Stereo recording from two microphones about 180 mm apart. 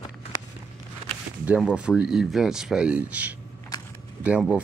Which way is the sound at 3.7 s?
20° left (ahead or behind).